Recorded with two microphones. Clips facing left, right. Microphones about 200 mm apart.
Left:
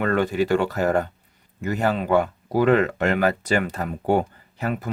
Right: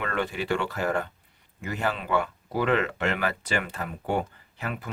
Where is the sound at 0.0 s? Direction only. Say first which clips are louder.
Left 8 dB; 45° left (ahead or behind).